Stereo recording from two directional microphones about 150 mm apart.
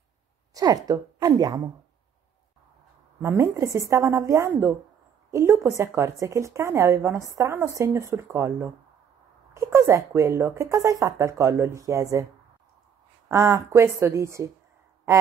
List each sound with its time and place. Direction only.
0.6 s speech: 25° right (ahead or behind)
3.2 s speech: 20° right (ahead or behind)
13.3 s speech: 20° right (ahead or behind)